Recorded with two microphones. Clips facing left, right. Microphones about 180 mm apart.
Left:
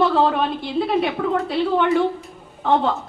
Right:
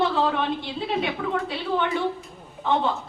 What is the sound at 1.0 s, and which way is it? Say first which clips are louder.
A woman's voice: left 5 dB; 40° left (ahead or behind).